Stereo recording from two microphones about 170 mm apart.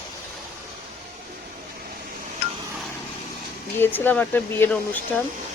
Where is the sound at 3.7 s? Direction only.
10° left (ahead or behind).